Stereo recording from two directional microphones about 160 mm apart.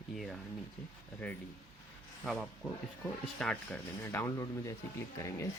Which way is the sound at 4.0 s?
15° left (ahead or behind).